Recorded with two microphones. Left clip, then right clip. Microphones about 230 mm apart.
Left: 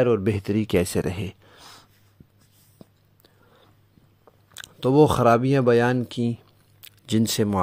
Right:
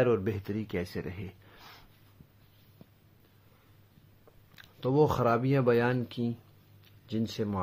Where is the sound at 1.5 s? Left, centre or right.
Left.